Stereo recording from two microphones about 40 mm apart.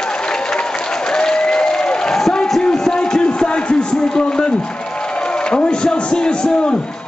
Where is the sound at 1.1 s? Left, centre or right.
Centre.